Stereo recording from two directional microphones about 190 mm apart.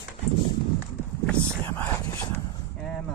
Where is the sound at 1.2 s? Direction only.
10° left (ahead or behind).